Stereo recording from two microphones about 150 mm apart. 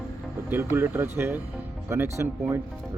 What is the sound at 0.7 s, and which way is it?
Speech, 15° right (ahead or behind).